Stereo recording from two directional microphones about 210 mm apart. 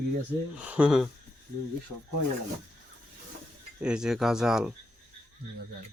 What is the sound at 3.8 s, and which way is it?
Speech, 5° right (ahead or behind).